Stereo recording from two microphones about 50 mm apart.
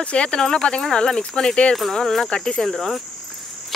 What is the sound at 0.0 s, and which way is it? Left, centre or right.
Speech, left.